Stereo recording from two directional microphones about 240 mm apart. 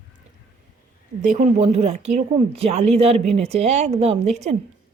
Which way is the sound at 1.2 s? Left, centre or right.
Right.